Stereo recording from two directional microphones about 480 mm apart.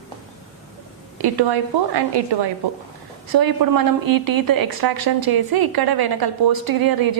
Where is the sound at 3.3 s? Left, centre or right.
Right.